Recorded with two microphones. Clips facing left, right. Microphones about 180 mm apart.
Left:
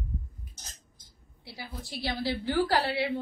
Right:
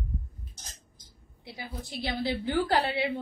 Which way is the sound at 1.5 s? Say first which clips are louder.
Right 2 dB; 20° right (ahead or behind).